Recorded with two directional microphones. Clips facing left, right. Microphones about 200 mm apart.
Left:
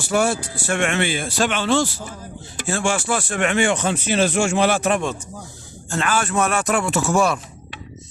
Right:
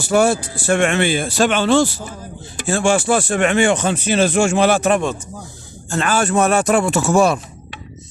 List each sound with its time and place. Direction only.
0.1 s speech: 40° right (ahead or behind)